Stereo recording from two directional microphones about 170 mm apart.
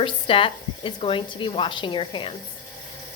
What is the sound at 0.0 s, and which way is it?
A woman's voice, 30° left (ahead or behind).